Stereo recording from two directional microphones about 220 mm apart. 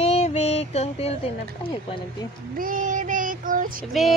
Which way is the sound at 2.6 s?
35° right (ahead or behind).